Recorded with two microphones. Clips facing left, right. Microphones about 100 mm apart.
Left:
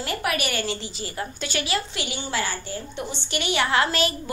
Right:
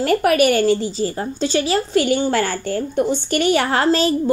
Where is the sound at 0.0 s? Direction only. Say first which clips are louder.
Right 12 dB; 45° right (ahead or behind).